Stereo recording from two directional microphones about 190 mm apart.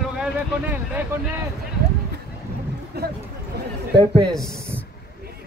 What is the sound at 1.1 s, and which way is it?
Speech, 15° right (ahead or behind).